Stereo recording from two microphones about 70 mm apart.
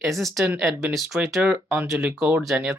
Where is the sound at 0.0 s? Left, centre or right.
Centre.